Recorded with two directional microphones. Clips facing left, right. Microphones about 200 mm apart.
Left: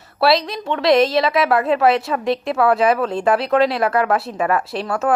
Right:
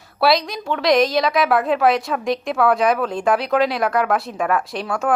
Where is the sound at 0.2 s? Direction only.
Centre (ahead or behind).